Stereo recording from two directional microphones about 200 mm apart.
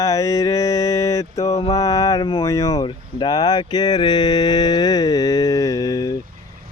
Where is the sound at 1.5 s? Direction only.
30° left (ahead or behind).